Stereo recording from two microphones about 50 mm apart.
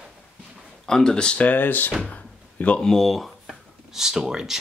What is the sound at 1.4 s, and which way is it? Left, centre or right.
Speech, left.